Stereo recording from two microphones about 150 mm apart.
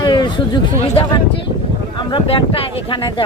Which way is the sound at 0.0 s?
30° left (ahead or behind).